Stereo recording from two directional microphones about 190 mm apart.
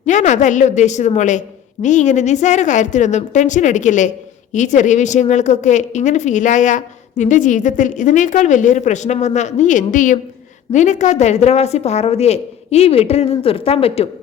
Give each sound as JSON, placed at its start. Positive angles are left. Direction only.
{"t": 0.0, "sound": "a woman's voice", "side_deg": 40}